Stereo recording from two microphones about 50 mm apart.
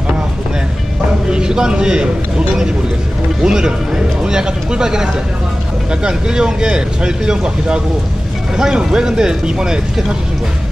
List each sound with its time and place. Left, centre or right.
1.3 s a man's voice: centre
3.4 s speech: centre